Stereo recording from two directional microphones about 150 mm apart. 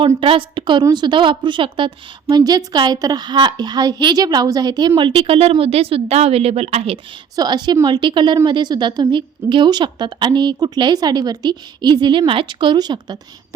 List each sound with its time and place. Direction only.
0.2 s a woman's voice: 35° right (ahead or behind)
7.3 s a woman's voice: 30° right (ahead or behind)